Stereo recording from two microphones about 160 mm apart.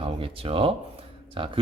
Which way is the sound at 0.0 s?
35° right (ahead or behind).